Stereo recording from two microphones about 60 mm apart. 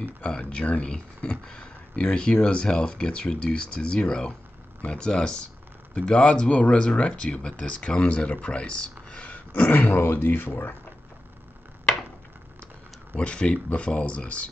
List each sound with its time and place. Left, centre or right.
0.0 s speech: centre
9.1 s dog: centre
9.5 s speech: left
13.1 s speech: left